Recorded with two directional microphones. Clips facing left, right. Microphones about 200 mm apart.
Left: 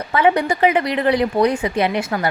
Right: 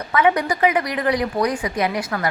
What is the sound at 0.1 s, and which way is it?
A woman's voice, 30° left (ahead or behind).